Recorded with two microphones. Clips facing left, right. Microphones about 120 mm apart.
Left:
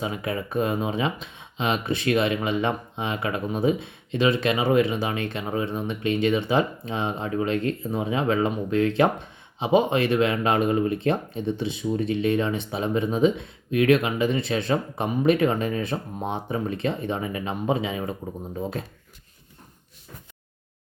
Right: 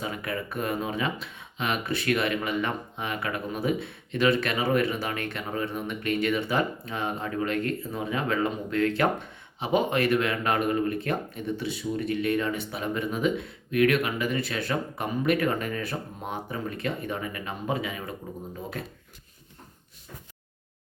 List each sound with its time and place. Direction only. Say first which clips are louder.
0.0 s speech: left 4 dB; 20° left (ahead or behind)